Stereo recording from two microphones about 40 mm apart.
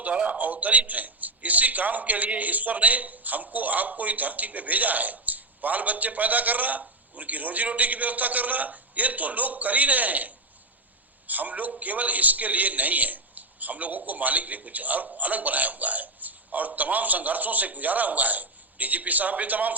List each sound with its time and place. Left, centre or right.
0.0 s a man's voice: right
0.4 s a man's voice: right